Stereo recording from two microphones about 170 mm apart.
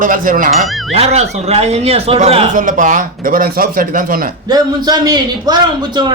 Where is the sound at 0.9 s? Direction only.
40° right (ahead or behind).